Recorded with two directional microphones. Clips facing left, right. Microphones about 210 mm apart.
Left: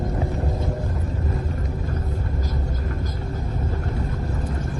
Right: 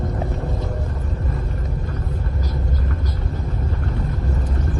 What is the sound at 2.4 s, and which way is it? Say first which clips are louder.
Vehicle: right 1 dB; 45° left (ahead or behind).